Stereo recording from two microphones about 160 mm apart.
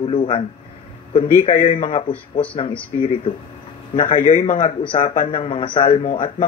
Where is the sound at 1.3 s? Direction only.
50° left (ahead or behind).